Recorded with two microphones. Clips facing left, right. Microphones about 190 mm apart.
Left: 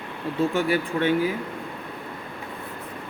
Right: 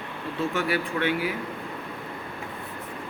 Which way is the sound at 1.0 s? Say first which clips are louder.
Left 3 dB; 30° left (ahead or behind).